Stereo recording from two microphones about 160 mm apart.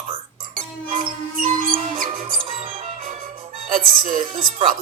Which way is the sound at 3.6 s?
60° right (ahead or behind).